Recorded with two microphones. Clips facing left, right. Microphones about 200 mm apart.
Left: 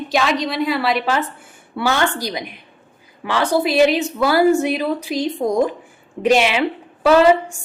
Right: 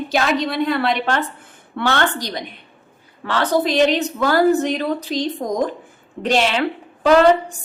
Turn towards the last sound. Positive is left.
turn(degrees=5)  # may be behind; listen again after turning